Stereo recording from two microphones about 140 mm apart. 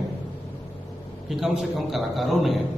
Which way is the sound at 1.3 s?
Centre (ahead or behind).